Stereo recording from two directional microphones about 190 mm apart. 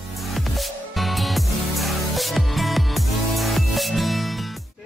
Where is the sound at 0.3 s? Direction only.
Centre (ahead or behind).